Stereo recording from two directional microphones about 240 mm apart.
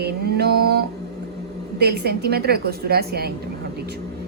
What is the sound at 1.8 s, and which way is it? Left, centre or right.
A woman's voice, right.